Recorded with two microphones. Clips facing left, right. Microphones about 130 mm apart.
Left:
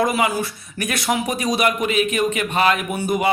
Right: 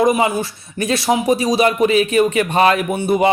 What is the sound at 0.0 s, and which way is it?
Speech, 25° right (ahead or behind).